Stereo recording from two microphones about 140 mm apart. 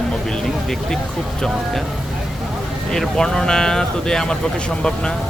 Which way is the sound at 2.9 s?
5° left (ahead or behind).